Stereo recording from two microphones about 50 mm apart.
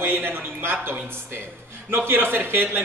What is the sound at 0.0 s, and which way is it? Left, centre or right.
Speech, right.